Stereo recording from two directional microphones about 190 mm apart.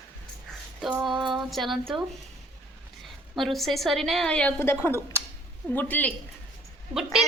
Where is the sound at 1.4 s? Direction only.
Centre (ahead or behind).